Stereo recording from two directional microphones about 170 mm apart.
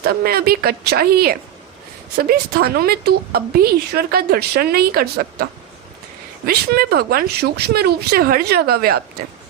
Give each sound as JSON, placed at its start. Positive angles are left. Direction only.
{"t": 0.0, "sound": "a woman's voice", "side_deg": -65}